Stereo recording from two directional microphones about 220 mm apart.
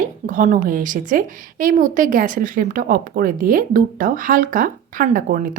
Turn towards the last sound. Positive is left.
turn(degrees=-35)  # may be behind; listen again after turning